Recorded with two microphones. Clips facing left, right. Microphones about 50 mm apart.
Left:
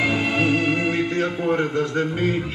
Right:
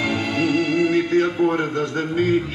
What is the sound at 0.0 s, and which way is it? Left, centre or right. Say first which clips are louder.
Music: left 1 dB; centre.